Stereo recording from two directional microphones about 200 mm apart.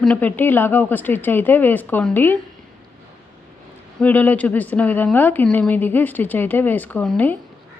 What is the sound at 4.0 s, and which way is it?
A woman's voice, 10° left (ahead or behind).